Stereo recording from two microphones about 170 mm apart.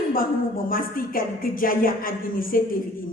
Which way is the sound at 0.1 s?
55° left (ahead or behind).